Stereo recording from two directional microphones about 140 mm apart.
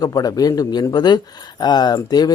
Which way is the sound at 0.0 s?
25° left (ahead or behind).